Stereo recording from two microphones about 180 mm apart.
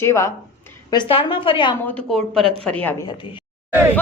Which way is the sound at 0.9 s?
25° left (ahead or behind).